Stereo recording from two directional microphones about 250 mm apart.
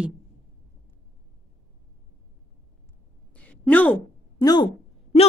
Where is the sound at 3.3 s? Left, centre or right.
Centre.